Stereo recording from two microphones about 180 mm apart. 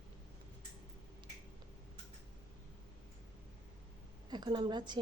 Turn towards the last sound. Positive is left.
turn(degrees=-25)  # may be behind; listen again after turning